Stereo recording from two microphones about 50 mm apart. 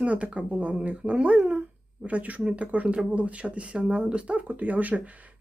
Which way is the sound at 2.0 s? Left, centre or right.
Right.